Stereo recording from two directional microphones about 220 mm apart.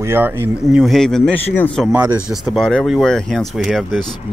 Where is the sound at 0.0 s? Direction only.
10° right (ahead or behind).